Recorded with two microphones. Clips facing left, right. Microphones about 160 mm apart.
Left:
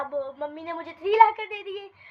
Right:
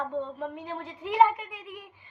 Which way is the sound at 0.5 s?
80° left.